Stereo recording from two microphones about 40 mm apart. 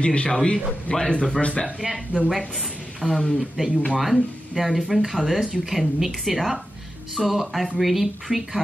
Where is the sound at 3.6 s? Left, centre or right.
Centre.